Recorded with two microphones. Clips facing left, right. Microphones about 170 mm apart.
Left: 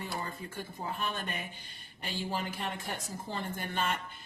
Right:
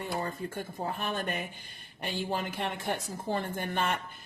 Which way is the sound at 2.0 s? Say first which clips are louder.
Right 3 dB; 60° right (ahead or behind).